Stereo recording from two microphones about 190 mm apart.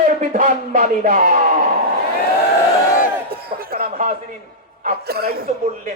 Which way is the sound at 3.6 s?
50° right (ahead or behind).